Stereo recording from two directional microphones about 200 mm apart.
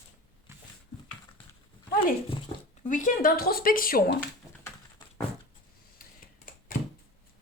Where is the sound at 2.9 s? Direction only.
45° left (ahead or behind).